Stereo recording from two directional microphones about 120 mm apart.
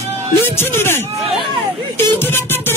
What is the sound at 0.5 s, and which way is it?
Music, 20° left (ahead or behind).